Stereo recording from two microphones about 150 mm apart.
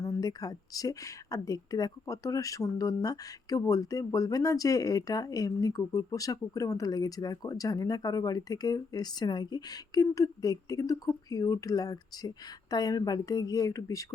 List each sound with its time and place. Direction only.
0.0 s speech: 25° left (ahead or behind)